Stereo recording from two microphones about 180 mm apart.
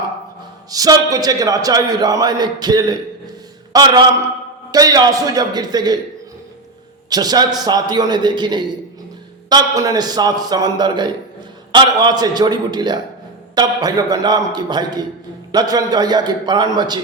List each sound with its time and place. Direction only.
0.7 s a man's voice: 20° right (ahead or behind)
7.1 s a man's voice: 20° right (ahead or behind)